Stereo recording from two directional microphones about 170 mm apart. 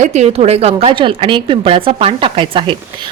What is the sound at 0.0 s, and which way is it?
A woman's voice, 40° right (ahead or behind).